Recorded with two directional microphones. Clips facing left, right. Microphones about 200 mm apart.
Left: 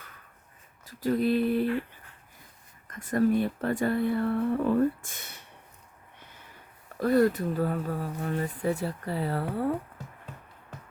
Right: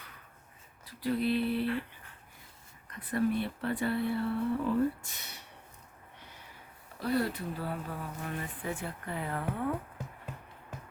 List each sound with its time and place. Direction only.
0.9 s speech: 45° left (ahead or behind)
2.8 s speech: 45° left (ahead or behind)
7.0 s speech: 45° left (ahead or behind)